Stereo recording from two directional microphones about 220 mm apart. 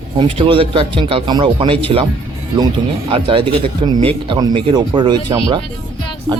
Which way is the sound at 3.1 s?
25° right (ahead or behind).